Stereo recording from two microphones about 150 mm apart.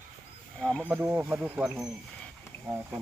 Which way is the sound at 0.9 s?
10° right (ahead or behind).